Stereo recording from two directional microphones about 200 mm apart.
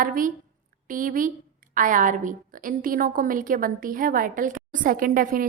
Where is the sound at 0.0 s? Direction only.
45° right (ahead or behind).